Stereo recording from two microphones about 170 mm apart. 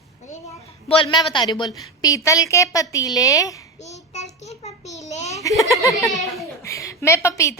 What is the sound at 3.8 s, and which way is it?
Child singing, 40° left (ahead or behind).